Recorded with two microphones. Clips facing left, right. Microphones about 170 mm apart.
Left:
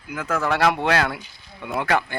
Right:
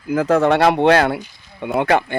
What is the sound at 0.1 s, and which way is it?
Speech, 35° right (ahead or behind).